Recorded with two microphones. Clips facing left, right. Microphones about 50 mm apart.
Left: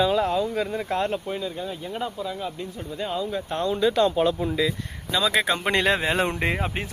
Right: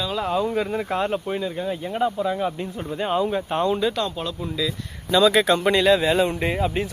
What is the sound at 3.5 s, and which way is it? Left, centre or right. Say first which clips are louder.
Speech: right 3 dB; right.